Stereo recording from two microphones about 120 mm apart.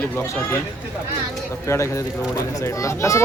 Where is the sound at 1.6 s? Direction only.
25° left (ahead or behind).